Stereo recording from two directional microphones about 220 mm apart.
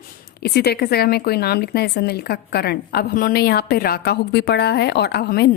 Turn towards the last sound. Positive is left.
turn(degrees=45)  # may be behind; listen again after turning